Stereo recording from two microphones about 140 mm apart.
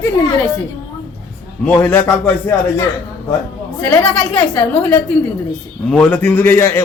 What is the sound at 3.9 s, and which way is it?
Speech, 15° left (ahead or behind).